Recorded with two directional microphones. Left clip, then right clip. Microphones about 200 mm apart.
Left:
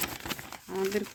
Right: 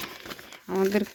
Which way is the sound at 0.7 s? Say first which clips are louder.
Right 6 dB; 40° right (ahead or behind).